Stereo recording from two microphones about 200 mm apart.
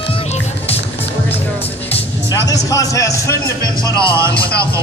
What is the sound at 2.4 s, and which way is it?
Speech, 15° left (ahead or behind).